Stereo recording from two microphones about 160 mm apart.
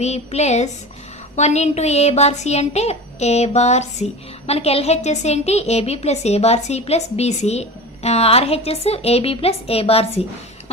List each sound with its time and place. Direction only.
0.0 s a child's voice: 45° left (ahead or behind)